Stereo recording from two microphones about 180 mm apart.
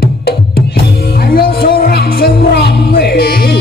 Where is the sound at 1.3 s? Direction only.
60° left (ahead or behind).